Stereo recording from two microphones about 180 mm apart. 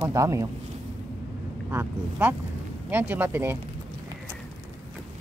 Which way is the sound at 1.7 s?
10° right (ahead or behind).